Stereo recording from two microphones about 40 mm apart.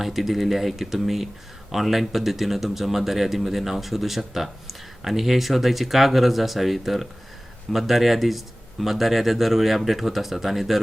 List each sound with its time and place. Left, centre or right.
0.0 s a man's voice: centre